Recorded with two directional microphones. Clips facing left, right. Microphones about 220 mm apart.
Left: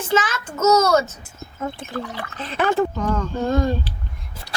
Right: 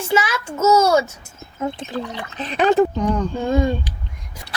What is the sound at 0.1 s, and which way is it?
A child's voice, 10° right (ahead or behind).